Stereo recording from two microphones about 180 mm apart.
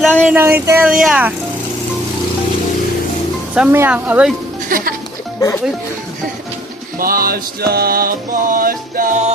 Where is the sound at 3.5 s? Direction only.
10° right (ahead or behind).